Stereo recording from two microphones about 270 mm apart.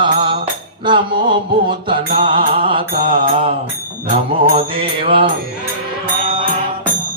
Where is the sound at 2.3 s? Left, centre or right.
Centre.